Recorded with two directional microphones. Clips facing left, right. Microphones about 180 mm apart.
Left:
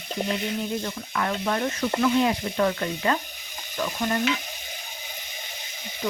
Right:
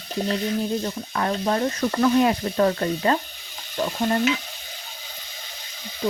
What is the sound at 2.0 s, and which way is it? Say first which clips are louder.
Speech: right 4 dB; 45° right (ahead or behind).